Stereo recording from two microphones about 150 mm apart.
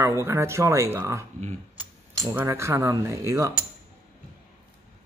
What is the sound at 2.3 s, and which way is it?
Speech, 20° right (ahead or behind).